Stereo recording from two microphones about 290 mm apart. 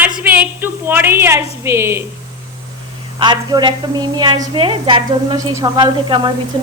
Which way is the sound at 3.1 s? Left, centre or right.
Centre.